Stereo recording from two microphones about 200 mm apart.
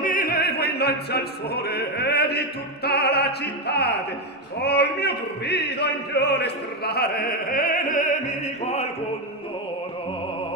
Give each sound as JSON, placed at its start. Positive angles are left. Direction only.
{"t": 0.0, "sound": "opera", "side_deg": 45}
{"t": 4.6, "sound": "a man's voice", "side_deg": 55}